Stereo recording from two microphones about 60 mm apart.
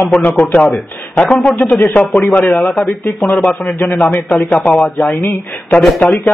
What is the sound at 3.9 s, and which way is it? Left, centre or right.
Speech, left.